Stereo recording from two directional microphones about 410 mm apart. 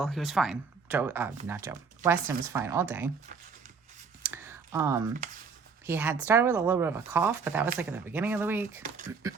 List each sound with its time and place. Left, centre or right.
0.0 s speech: centre
4.4 s typing: centre
5.8 s speech: centre